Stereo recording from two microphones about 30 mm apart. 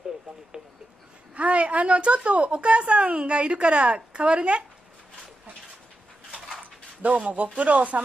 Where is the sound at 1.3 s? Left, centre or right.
Right.